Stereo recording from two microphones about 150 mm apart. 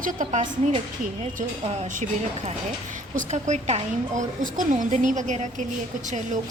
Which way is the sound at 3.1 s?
50° right (ahead or behind).